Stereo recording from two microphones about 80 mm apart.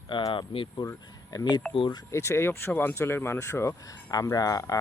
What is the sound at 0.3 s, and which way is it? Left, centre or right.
Speech, left.